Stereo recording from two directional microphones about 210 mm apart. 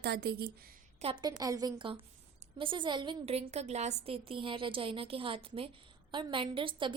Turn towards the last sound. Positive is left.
turn(degrees=-25)  # may be behind; listen again after turning